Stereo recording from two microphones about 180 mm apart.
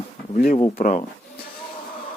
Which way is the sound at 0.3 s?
50° left (ahead or behind).